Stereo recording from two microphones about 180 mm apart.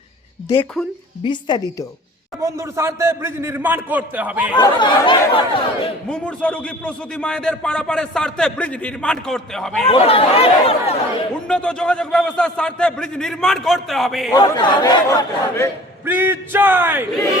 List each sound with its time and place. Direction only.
0.5 s speech: 10° left (ahead or behind)
1.2 s a man's voice: 25° left (ahead or behind)
2.4 s a man's voice: 15° right (ahead or behind)
4.5 s a man's voice: 25° left (ahead or behind)
6.1 s a man's voice: 5° left (ahead or behind)
9.9 s speech: 30° left (ahead or behind)
11.4 s a man's voice: 5° left (ahead or behind)
14.3 s a man's voice: 20° left (ahead or behind)
16.0 s a man's voice: 10° right (ahead or behind)